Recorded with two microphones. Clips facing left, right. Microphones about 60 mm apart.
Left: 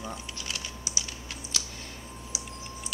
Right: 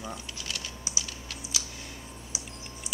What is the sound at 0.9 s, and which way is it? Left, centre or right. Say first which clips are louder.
Typing: right 1 dB; right.